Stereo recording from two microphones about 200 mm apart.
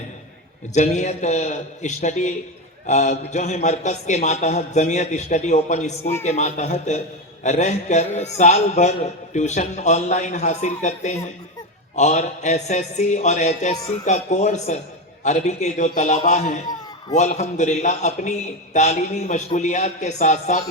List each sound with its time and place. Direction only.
0.7 s a man's voice: 35° left (ahead or behind)